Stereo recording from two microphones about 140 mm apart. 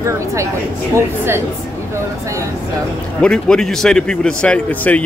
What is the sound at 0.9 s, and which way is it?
Speech, 15° right (ahead or behind).